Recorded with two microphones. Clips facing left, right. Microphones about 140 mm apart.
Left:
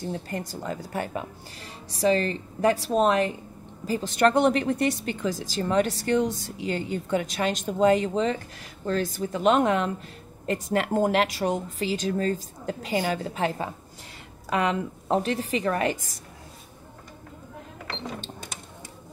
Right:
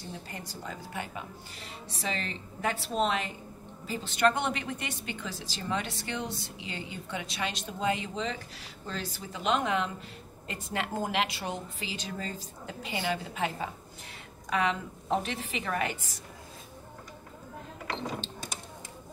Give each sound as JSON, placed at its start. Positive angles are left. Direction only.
{"t": 0.3, "sound": "a woman's voice", "side_deg": 45}
{"t": 15.0, "sound": "speech", "side_deg": 40}